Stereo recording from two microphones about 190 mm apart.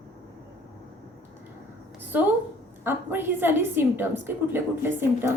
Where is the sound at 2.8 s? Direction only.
10° right (ahead or behind).